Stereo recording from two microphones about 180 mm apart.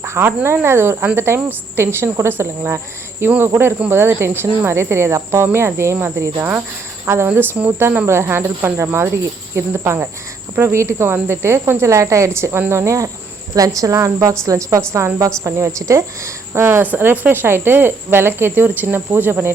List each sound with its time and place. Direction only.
0.0 s speech: 15° right (ahead or behind)